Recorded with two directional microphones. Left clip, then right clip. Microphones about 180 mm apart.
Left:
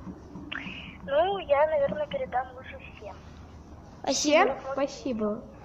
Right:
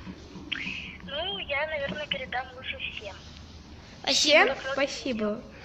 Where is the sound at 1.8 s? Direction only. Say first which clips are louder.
Left 4 dB; 20° left (ahead or behind).